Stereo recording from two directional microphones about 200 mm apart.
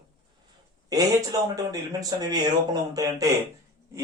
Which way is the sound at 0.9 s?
20° right (ahead or behind).